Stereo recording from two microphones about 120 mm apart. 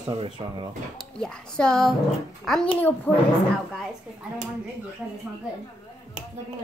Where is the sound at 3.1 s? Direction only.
15° left (ahead or behind).